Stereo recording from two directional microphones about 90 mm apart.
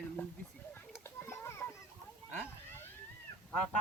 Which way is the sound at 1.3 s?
30° left (ahead or behind).